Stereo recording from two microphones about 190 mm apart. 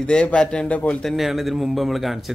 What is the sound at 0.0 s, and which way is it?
Speech, 5° left (ahead or behind).